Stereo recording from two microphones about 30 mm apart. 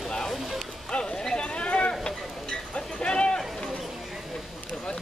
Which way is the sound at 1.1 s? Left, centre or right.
Left.